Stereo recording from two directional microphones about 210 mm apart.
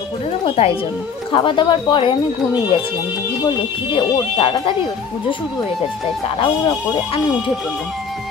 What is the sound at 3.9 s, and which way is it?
Speech, 25° left (ahead or behind).